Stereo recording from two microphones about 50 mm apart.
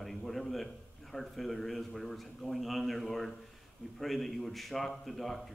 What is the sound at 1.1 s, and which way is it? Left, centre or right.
A man's voice, centre.